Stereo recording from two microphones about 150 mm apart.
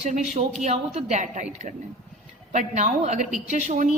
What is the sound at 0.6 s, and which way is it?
Speech, 50° right (ahead or behind).